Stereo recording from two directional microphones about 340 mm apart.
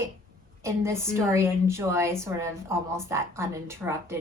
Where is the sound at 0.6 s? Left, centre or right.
Centre.